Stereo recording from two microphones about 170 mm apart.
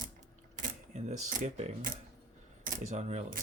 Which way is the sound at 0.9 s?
45° right (ahead or behind).